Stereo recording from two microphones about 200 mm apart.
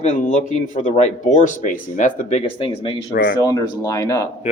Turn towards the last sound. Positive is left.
turn(degrees=15)  # may be behind; listen again after turning